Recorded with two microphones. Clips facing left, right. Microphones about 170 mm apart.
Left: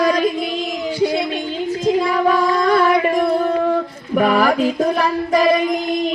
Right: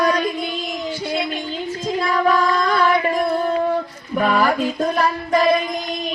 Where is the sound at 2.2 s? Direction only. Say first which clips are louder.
Left 1 dB; 15° left (ahead or behind).